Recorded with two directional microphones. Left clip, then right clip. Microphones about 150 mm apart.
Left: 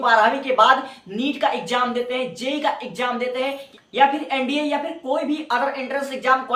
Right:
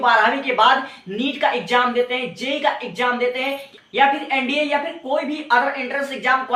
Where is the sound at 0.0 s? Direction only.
40° left (ahead or behind).